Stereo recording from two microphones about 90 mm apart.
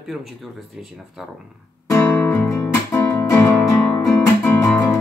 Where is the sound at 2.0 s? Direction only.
15° left (ahead or behind).